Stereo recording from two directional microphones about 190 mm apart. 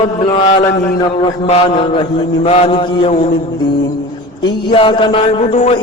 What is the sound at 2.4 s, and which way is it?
Speech, 30° left (ahead or behind).